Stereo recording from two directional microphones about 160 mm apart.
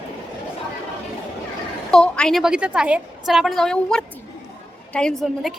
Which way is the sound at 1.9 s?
5° left (ahead or behind).